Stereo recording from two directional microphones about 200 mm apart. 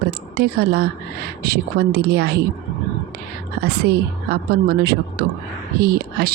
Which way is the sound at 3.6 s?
55° right (ahead or behind).